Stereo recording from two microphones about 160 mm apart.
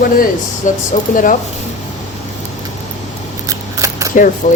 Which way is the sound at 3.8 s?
20° right (ahead or behind).